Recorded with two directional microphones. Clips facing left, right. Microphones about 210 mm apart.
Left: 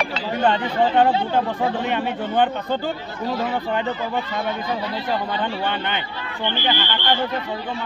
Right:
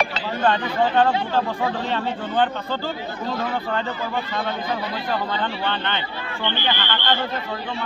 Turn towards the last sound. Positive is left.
turn(degrees=10)  # may be behind; listen again after turning